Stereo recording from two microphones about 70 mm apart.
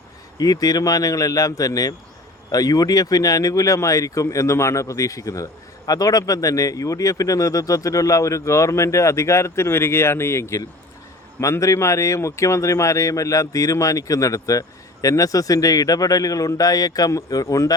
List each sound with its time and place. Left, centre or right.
0.3 s a man's voice: left
11.6 s a man's voice: left